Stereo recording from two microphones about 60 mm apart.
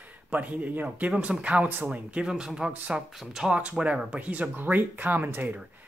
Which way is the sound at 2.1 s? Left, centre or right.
Centre.